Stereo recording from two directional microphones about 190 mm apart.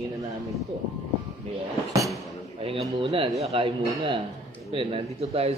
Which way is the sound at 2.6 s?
30° right (ahead or behind).